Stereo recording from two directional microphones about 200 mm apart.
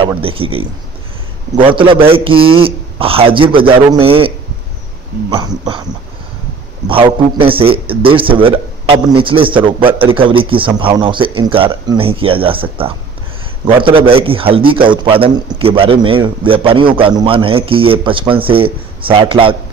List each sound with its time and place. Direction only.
0.2 s a man's voice: 25° right (ahead or behind)
5.3 s a man's voice: 25° right (ahead or behind)
6.9 s a man's voice: 25° right (ahead or behind)
13.7 s a man's voice: 25° right (ahead or behind)